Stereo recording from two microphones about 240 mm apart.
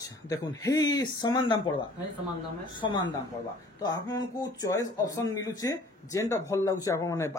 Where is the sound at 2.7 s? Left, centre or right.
Centre.